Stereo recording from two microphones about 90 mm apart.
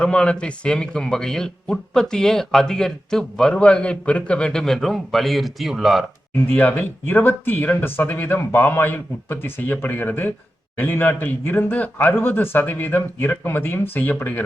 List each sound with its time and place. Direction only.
0.0 s speech: 10° left (ahead or behind)
6.5 s speech: 20° left (ahead or behind)